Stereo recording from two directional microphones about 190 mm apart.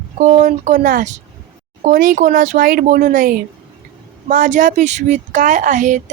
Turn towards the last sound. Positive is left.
turn(degrees=-40)  # may be behind; listen again after turning